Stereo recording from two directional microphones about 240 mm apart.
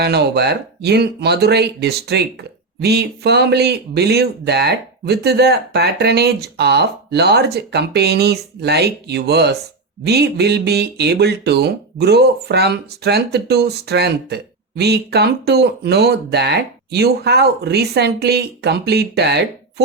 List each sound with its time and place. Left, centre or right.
0.0 s speech: right